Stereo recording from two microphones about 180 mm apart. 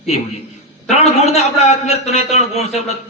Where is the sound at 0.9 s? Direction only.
35° left (ahead or behind).